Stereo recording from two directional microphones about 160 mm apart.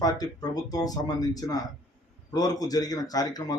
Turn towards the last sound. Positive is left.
turn(degrees=25)  # may be behind; listen again after turning